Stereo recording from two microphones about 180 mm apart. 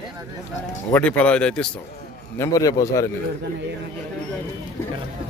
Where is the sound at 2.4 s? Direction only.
20° left (ahead or behind).